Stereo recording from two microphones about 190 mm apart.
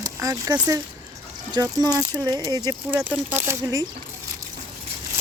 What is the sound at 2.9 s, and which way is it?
Speech, 10° right (ahead or behind).